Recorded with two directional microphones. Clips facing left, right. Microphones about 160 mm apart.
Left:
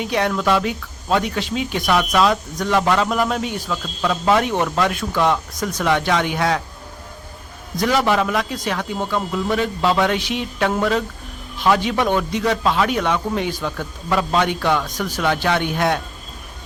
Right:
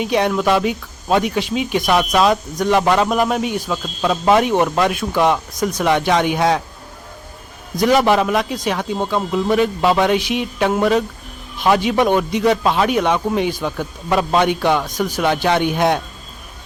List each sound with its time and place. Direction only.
0.0 s speech: 20° right (ahead or behind)
7.8 s speech: 15° right (ahead or behind)